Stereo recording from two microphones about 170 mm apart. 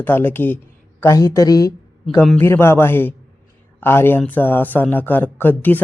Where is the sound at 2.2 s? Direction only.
10° left (ahead or behind).